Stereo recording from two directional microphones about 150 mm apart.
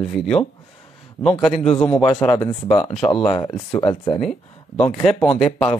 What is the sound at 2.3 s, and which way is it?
Speech, 30° left (ahead or behind).